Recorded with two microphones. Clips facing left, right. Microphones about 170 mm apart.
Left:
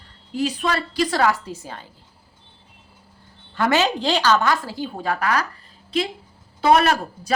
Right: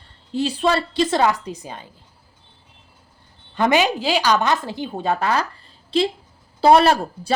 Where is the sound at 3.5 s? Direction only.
20° right (ahead or behind).